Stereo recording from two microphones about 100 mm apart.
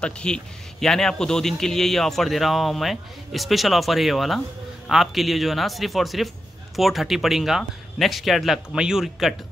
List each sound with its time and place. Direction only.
0.0 s a man's voice: 10° left (ahead or behind)